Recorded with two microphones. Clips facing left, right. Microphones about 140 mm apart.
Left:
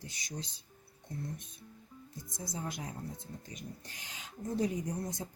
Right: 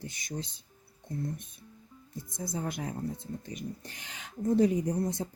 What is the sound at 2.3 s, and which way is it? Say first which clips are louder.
Speech: right 5 dB; 55° right (ahead or behind).